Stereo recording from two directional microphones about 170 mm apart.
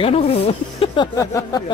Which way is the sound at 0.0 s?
35° left (ahead or behind).